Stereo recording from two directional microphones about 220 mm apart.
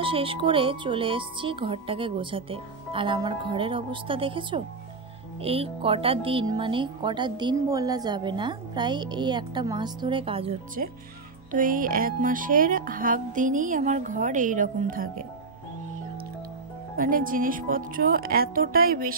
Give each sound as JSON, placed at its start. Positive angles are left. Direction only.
{"t": 0.0, "sound": "speech", "side_deg": -25}
{"t": 11.5, "sound": "music", "side_deg": -40}
{"t": 16.9, "sound": "music", "side_deg": -40}